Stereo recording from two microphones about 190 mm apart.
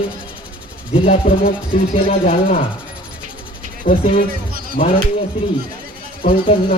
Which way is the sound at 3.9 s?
45° left (ahead or behind).